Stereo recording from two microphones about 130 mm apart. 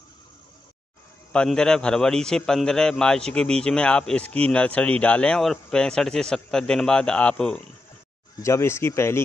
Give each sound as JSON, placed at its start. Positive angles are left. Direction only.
{"t": 1.3, "sound": "a man's voice", "side_deg": 5}
{"t": 8.4, "sound": "speech", "side_deg": 20}